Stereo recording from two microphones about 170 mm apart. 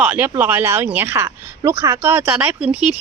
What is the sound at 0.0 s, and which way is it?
Speech, 10° right (ahead or behind).